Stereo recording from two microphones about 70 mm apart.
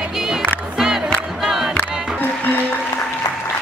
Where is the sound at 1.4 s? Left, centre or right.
Centre.